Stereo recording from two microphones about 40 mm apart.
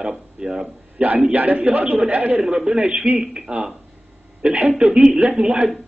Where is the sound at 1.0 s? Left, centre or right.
Right.